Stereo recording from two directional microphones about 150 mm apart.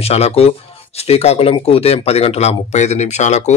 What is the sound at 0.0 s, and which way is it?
Speech, 45° left (ahead or behind).